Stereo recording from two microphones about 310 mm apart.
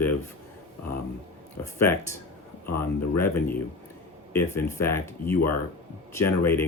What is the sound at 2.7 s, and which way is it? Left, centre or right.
Speech, centre.